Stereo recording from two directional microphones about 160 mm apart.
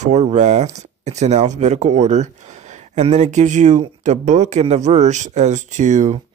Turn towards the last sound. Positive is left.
turn(degrees=-45)  # may be behind; listen again after turning